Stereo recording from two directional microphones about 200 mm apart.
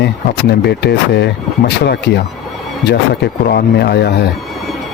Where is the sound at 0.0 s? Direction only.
55° left (ahead or behind).